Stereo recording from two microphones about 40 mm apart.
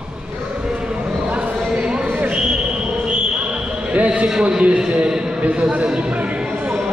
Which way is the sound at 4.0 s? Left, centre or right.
Right.